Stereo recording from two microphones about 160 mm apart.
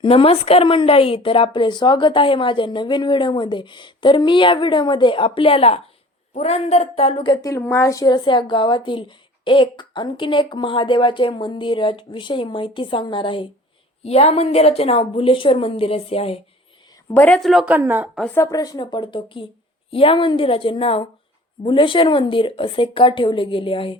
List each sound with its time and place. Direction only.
0.0 s a woman's voice: 35° left (ahead or behind)
17.2 s a woman's voice: 10° left (ahead or behind); by 18.1 s 10° right (ahead or behind)
18.5 s a woman's voice: 25° left (ahead or behind)